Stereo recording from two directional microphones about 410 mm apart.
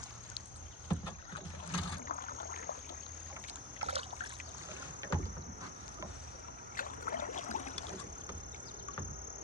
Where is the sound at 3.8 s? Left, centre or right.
Centre.